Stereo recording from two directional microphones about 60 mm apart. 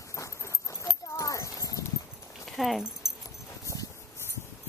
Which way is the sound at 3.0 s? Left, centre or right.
Centre.